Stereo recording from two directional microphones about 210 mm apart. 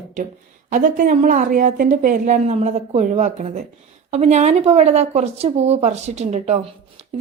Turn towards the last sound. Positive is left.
turn(degrees=-30)  # may be behind; listen again after turning